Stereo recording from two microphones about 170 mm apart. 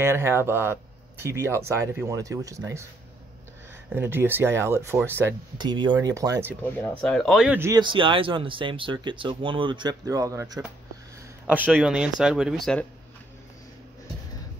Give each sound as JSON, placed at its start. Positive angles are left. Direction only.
{"t": 0.0, "sound": "speech", "side_deg": -15}
{"t": 3.9, "sound": "speech", "side_deg": -15}
{"t": 5.6, "sound": "speech", "side_deg": -25}
{"t": 6.6, "sound": "speech", "side_deg": 10}
{"t": 7.5, "sound": "speech", "side_deg": -15}
{"t": 7.8, "sound": "speech", "side_deg": -30}
{"t": 11.4, "sound": "speech", "side_deg": -10}